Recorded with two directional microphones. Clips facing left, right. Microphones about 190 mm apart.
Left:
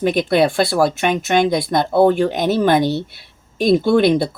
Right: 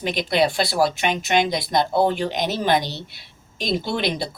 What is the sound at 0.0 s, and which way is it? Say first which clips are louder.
Speech: left 6 dB; 50° left (ahead or behind).